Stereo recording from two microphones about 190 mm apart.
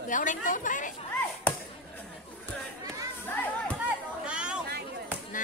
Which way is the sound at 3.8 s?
5° right (ahead or behind).